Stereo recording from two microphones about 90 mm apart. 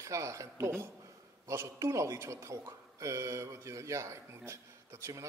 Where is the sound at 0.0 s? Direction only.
35° right (ahead or behind).